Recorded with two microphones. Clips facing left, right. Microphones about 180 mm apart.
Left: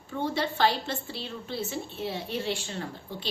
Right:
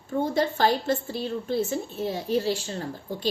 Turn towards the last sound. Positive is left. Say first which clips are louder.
# right 7 dB
turn(degrees=-40)  # may be behind; listen again after turning